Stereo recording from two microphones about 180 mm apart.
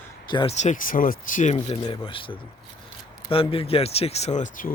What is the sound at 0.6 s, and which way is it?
Speech, 45° left (ahead or behind).